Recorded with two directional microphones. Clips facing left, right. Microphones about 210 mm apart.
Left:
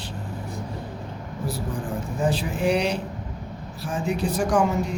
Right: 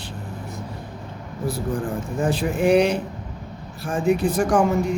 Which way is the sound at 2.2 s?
50° right (ahead or behind).